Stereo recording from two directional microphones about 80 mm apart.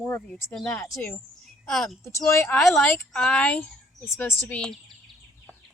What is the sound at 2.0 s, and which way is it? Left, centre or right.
Speech, left.